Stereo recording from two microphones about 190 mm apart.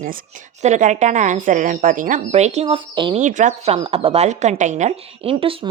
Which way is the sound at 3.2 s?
40° right (ahead or behind).